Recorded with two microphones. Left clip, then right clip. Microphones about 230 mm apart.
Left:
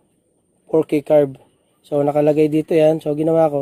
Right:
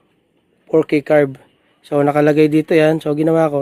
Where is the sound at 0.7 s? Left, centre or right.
Centre.